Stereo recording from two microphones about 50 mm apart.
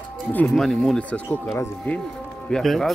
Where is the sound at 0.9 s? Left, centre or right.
Left.